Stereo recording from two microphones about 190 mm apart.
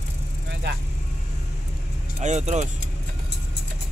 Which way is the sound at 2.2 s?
35° right (ahead or behind).